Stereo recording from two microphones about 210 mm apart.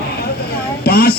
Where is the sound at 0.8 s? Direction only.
50° left (ahead or behind).